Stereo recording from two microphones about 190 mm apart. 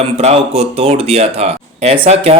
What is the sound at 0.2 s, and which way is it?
Speech, 35° right (ahead or behind).